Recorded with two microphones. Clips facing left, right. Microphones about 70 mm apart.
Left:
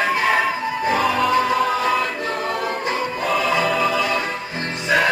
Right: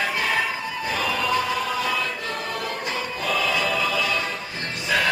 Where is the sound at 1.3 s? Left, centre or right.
Left.